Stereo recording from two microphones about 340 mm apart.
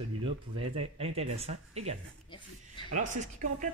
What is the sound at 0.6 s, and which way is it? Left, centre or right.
Speech, centre.